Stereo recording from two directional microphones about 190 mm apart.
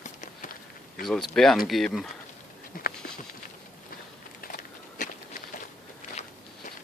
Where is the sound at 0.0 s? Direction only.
40° left (ahead or behind).